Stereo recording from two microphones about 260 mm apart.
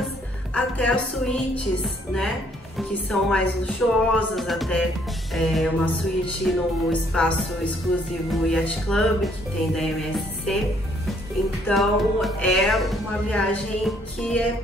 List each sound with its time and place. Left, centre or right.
0.6 s speech: centre
11.6 s speech: centre